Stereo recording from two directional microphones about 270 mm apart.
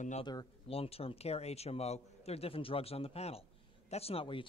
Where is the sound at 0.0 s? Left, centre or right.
Left.